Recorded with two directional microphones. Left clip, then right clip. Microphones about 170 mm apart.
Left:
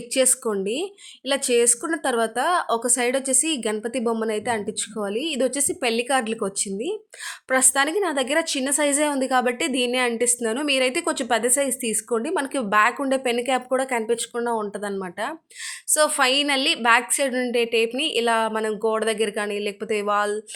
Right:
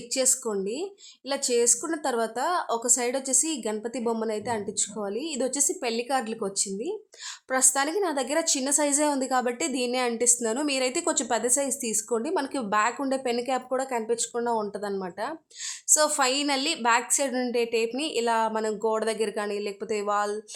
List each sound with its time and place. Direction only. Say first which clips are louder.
0.1 s a woman's voice: left 5 dB; 15° left (ahead or behind)
14.3 s a woman's voice: left 2 dB; centre (ahead or behind)